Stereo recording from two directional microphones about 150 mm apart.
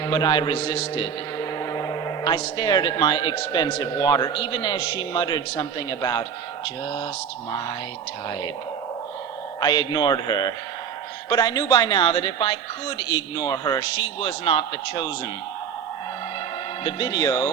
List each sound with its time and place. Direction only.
0.0 s a man's voice: 25° left (ahead or behind)
9.6 s a man's voice: 30° left (ahead or behind)
16.8 s a man's voice: 25° left (ahead or behind)